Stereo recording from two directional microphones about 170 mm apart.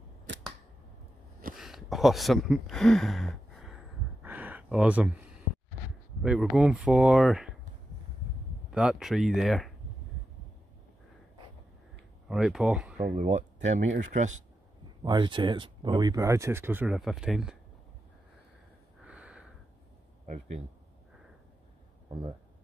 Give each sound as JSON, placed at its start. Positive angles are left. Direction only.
{"t": 0.3, "sound": "camera", "side_deg": -90}
{"t": 1.6, "sound": "a sound", "side_deg": 0}
{"t": 6.2, "sound": "speech", "side_deg": -5}
{"t": 8.7, "sound": "speech", "side_deg": -5}
{"t": 12.3, "sound": "speech", "side_deg": -5}
{"t": 13.2, "sound": "speech", "side_deg": -45}
{"t": 15.0, "sound": "speech", "side_deg": -30}
{"t": 19.0, "sound": "a sound", "side_deg": -5}
{"t": 20.2, "sound": "speech", "side_deg": -45}